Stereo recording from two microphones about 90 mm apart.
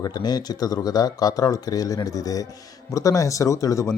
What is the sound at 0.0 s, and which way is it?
Speech, 50° left (ahead or behind).